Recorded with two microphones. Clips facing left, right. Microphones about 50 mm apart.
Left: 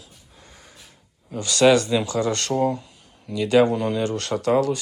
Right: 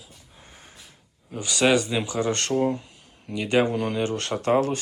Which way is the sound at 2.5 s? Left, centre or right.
Centre.